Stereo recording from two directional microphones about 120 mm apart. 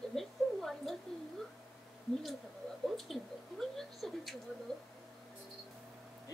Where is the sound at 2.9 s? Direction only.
Centre (ahead or behind).